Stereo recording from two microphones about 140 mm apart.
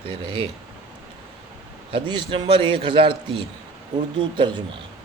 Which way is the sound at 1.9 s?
35° right (ahead or behind).